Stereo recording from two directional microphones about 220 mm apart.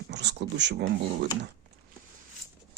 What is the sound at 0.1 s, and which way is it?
Speech, 50° right (ahead or behind).